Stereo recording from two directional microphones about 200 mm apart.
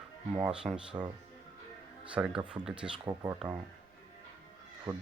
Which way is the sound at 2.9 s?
20° right (ahead or behind).